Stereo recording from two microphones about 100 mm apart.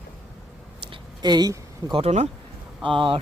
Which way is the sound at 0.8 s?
50° right (ahead or behind).